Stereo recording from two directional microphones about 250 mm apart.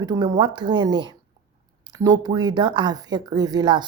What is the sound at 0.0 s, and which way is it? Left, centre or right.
A woman's voice, centre.